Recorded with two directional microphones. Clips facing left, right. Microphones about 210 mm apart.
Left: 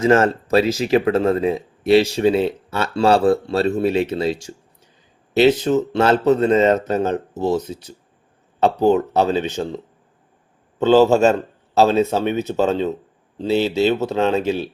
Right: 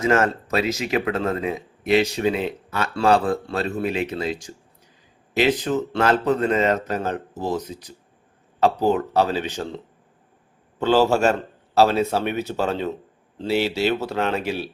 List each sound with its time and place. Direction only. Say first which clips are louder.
0.0 s speech: left 5 dB; 30° left (ahead or behind)
5.3 s speech: left 6 dB; 30° left (ahead or behind)
8.8 s speech: left 4 dB; 25° left (ahead or behind)